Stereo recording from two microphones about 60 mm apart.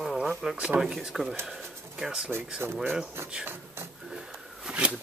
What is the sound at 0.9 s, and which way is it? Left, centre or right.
Speech, centre.